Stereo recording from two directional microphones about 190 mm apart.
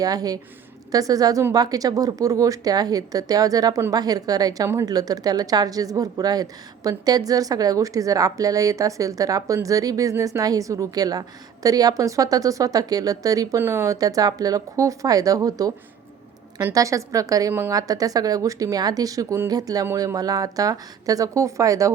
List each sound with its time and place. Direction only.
0.0 s a woman's voice: 20° right (ahead or behind)